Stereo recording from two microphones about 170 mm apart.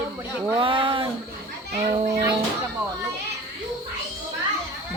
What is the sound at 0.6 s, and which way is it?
Speech, 30° right (ahead or behind).